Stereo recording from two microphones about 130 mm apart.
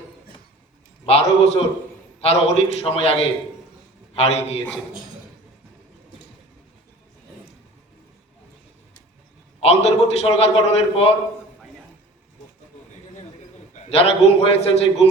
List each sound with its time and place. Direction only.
1.0 s a man's voice: 50° left (ahead or behind)
9.6 s a man's voice: 50° left (ahead or behind)
13.9 s a man's voice: 50° left (ahead or behind)